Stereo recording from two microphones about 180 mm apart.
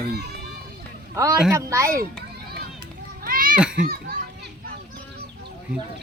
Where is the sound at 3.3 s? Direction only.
50° right (ahead or behind).